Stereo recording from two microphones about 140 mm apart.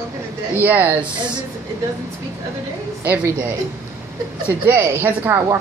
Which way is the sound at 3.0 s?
15° right (ahead or behind).